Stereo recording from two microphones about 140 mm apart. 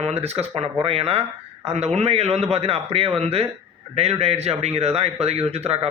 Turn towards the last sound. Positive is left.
turn(degrees=-50)  # may be behind; listen again after turning